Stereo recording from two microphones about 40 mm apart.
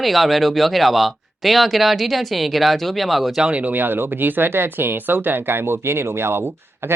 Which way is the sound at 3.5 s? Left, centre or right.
Right.